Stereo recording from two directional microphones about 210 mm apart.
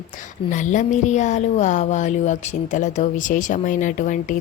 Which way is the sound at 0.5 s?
35° left (ahead or behind).